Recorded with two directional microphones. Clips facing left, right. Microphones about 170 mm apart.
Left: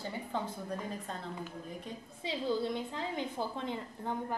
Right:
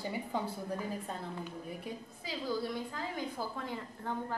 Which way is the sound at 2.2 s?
25° left (ahead or behind).